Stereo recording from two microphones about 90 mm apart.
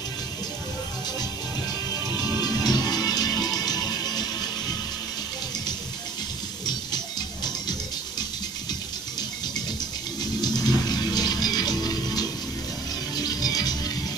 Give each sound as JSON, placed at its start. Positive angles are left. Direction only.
{"t": 2.0, "sound": "music", "side_deg": 45}
{"t": 6.6, "sound": "music", "side_deg": 50}
{"t": 10.4, "sound": "music", "side_deg": 50}